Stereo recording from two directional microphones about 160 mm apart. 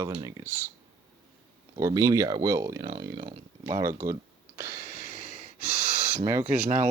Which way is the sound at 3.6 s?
20° right (ahead or behind).